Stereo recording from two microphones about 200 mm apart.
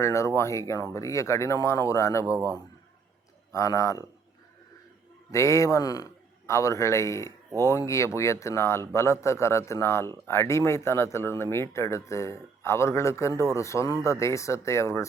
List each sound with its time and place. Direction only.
0.0 s speech: 15° left (ahead or behind)
3.5 s speech: 15° left (ahead or behind)
5.3 s speech: 15° left (ahead or behind)